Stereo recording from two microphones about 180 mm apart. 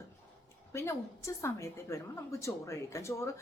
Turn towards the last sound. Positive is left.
turn(degrees=15)  # may be behind; listen again after turning